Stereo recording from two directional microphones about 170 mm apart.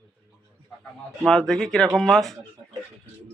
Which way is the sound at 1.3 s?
5° left (ahead or behind).